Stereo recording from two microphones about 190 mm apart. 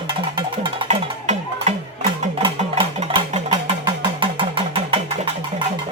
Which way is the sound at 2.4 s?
30° right (ahead or behind).